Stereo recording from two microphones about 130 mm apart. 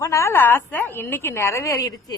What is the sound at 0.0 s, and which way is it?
A woman's voice, 20° left (ahead or behind).